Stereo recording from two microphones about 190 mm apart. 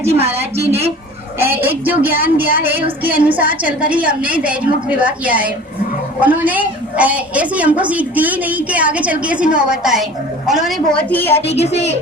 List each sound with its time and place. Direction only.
1.4 s a woman's voice: 10° right (ahead or behind); by 11.3 s 10° left (ahead or behind)
11.4 s speech: 35° left (ahead or behind)